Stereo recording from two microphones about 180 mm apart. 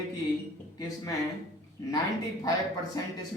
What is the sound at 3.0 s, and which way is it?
Speech, 20° left (ahead or behind).